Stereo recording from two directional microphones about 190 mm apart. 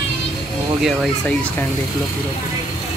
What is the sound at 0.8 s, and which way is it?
Speech, 5° left (ahead or behind).